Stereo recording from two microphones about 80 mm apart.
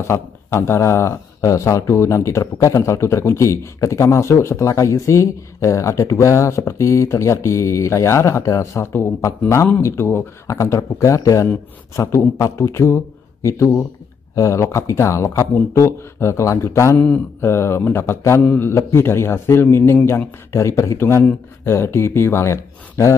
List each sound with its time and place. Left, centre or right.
0.0 s speech: left